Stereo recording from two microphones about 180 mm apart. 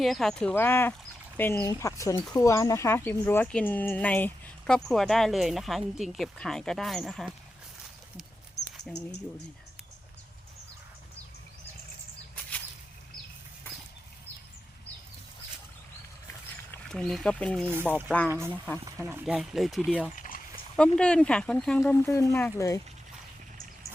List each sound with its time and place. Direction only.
0.0 s speech: centre (ahead or behind)
8.9 s speech: centre (ahead or behind)
13.7 s a sound: 10° left (ahead or behind)
16.7 s speech: 5° left (ahead or behind)
17.7 s speech: 10° right (ahead or behind)
20.1 s a sound: 50° left (ahead or behind)
20.7 s speech: 5° left (ahead or behind)